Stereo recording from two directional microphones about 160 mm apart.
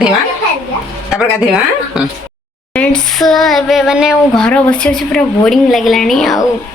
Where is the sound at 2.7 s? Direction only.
5° left (ahead or behind).